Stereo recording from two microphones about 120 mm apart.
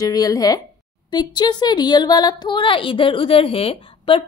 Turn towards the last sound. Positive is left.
turn(degrees=45)  # may be behind; listen again after turning